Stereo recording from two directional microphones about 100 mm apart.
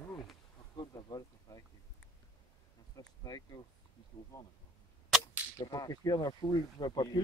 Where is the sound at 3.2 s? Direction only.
40° left (ahead or behind).